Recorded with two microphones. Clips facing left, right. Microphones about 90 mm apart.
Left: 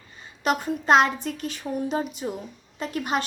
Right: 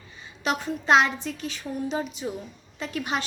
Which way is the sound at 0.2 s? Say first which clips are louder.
Left 3 dB; 45° left (ahead or behind).